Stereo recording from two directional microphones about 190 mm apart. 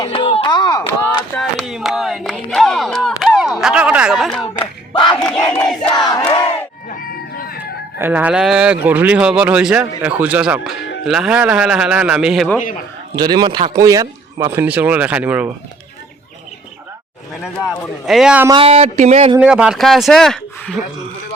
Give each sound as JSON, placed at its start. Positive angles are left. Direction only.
{"t": 0.0, "sound": "a sound", "side_deg": 25}
{"t": 1.4, "sound": "a sound", "side_deg": 0}
{"t": 5.1, "sound": "crowd", "side_deg": 5}
{"t": 6.1, "sound": "crowd", "side_deg": 20}
{"t": 7.3, "sound": "music", "side_deg": 55}
{"t": 7.6, "sound": "a man's voice", "side_deg": -10}
{"t": 13.1, "sound": "a man's voice", "side_deg": -20}
{"t": 18.0, "sound": "a man's voice", "side_deg": 0}
{"t": 18.4, "sound": "speech", "side_deg": -30}
{"t": 19.4, "sound": "a man's voice", "side_deg": -5}